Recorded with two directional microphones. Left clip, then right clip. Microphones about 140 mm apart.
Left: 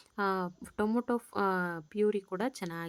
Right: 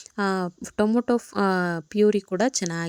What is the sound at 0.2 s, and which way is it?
A woman's voice, 35° right (ahead or behind).